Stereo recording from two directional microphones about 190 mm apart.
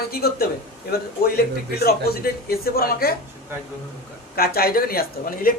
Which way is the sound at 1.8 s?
55° left (ahead or behind).